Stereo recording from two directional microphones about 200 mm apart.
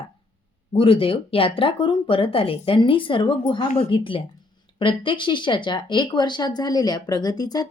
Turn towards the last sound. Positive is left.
turn(degrees=20)  # may be behind; listen again after turning